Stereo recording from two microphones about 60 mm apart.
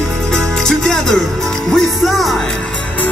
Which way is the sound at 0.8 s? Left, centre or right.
Centre.